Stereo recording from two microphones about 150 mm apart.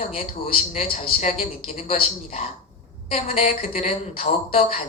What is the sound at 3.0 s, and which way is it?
Speech, 45° left (ahead or behind).